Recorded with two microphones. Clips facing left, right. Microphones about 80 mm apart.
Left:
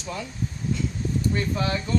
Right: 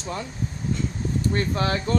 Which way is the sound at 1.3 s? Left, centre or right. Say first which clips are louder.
Right 3 dB; right.